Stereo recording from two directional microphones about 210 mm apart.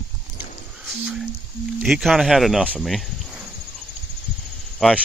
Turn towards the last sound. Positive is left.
turn(degrees=0)  # may be behind; listen again after turning